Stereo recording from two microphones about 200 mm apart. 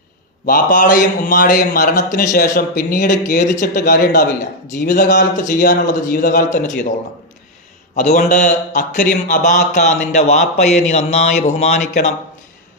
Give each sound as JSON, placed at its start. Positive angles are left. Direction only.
{"t": 0.4, "sound": "a man's voice", "side_deg": 45}
{"t": 7.9, "sound": "a man's voice", "side_deg": 40}